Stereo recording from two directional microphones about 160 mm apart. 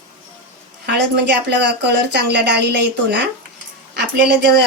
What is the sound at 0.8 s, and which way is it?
A woman's voice, 90° right.